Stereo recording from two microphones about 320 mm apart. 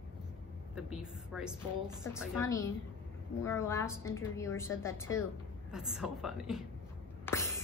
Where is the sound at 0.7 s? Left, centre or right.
Centre.